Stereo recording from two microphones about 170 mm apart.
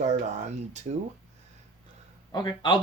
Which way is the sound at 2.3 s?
25° left (ahead or behind).